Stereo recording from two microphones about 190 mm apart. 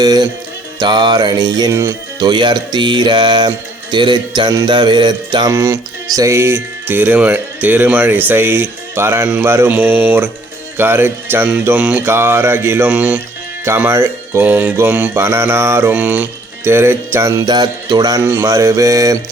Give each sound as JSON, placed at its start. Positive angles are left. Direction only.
{"t": 0.0, "sound": "music", "side_deg": -20}
{"t": 0.8, "sound": "speech", "side_deg": -25}
{"t": 3.9, "sound": "mantra", "side_deg": -25}